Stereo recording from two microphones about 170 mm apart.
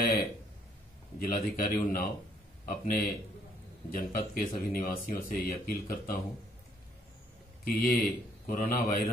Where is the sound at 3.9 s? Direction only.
55° left (ahead or behind).